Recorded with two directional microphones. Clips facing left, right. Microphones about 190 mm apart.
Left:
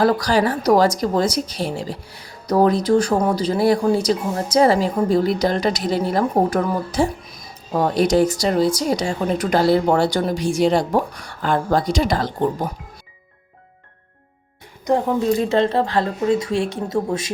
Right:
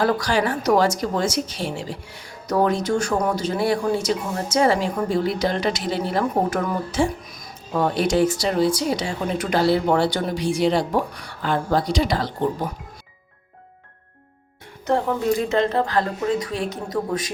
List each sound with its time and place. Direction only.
0.0 s a woman's voice: 40° left (ahead or behind)
14.9 s speech: 15° left (ahead or behind)
15.3 s speech: 30° left (ahead or behind)